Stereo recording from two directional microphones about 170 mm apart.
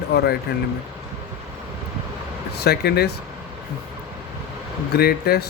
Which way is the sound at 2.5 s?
70° left (ahead or behind).